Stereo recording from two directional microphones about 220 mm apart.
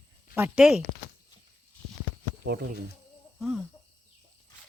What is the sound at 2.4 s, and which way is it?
Speech, 45° right (ahead or behind).